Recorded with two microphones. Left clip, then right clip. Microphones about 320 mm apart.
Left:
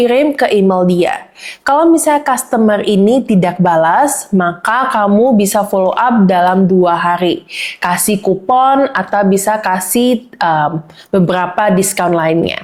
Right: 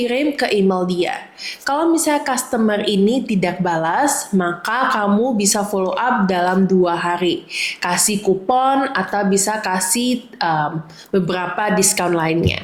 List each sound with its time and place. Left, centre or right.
0.0 s a woman's voice: left